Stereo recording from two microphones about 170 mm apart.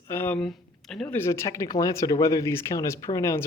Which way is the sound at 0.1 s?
10° left (ahead or behind).